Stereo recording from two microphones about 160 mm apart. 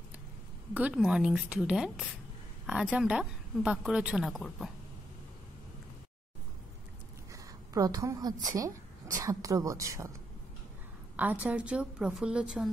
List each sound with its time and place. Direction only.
0.7 s a woman's voice: 10° right (ahead or behind)
7.3 s a woman's voice: 20° right (ahead or behind)
11.1 s a woman's voice: 10° right (ahead or behind)